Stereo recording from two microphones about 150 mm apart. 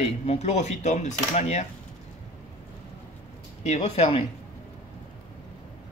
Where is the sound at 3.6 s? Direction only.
45° left (ahead or behind).